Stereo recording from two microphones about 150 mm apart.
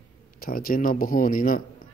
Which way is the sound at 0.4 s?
75° left (ahead or behind).